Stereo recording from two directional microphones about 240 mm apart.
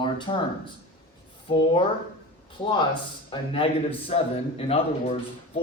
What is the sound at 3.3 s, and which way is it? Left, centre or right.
Speech, left.